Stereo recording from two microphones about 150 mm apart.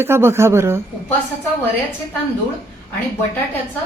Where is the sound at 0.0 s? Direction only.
15° right (ahead or behind).